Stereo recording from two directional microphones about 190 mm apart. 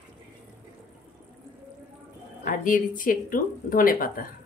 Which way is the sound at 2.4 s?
45° left (ahead or behind).